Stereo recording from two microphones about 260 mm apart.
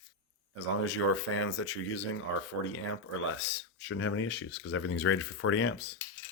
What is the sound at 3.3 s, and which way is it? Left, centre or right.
Speech, left.